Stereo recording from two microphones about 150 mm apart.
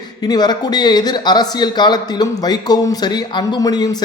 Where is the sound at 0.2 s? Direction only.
25° left (ahead or behind).